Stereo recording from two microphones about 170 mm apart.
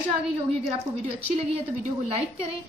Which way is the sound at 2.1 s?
35° right (ahead or behind).